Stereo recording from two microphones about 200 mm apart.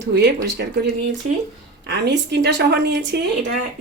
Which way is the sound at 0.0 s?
55° right (ahead or behind).